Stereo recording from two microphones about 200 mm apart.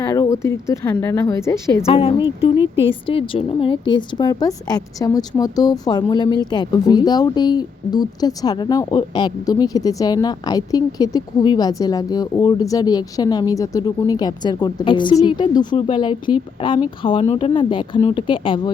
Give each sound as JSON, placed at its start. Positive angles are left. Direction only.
{"t": 0.0, "sound": "speech", "side_deg": 15}
{"t": 1.9, "sound": "a woman's voice", "side_deg": 30}